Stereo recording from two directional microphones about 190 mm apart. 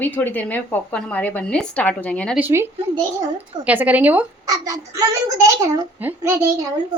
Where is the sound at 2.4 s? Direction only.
10° right (ahead or behind).